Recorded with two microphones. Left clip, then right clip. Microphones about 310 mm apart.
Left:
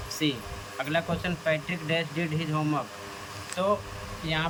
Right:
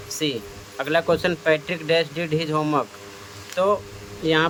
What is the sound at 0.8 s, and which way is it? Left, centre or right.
Speech, centre.